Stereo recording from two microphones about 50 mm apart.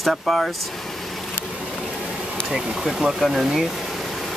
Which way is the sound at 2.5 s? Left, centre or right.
Centre.